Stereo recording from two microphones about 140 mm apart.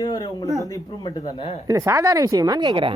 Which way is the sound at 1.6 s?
25° right (ahead or behind).